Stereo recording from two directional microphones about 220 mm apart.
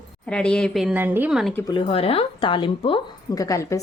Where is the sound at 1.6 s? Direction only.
25° left (ahead or behind).